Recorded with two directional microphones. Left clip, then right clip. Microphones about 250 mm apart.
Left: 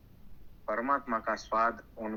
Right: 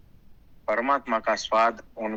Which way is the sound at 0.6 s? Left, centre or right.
Right.